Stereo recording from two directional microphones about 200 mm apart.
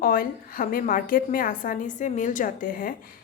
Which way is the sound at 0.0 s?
45° left (ahead or behind).